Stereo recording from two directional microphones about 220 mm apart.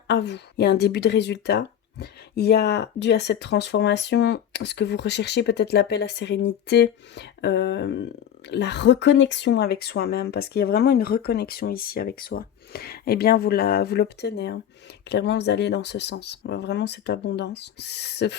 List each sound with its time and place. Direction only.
0.1 s speech: 50° left (ahead or behind)